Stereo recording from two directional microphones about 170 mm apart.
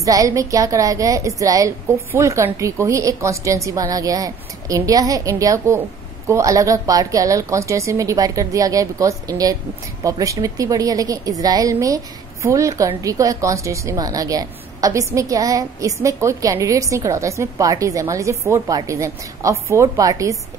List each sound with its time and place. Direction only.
0.0 s a woman's voice: 20° right (ahead or behind)